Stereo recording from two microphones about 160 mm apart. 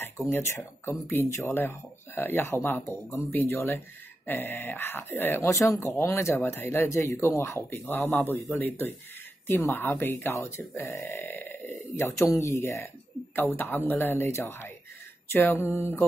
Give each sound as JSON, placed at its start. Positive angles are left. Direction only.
{"t": 0.3, "sound": "speech", "side_deg": 15}